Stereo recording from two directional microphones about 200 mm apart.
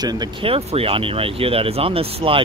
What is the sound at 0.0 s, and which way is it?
Speech, 20° right (ahead or behind).